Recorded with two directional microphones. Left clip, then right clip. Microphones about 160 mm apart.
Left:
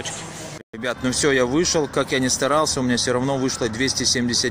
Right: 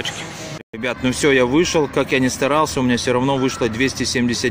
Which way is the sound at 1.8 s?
20° right (ahead or behind).